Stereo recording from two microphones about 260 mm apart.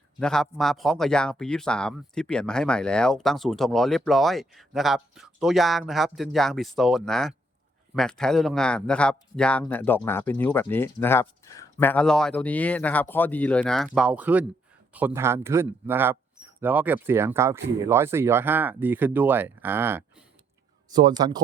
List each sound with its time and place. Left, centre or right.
0.2 s speech: centre